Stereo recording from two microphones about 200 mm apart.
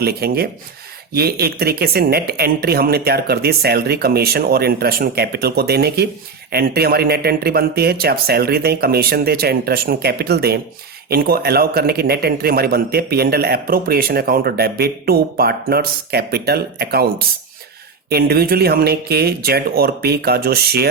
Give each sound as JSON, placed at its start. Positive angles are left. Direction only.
{"t": 0.0, "sound": "speech", "side_deg": -50}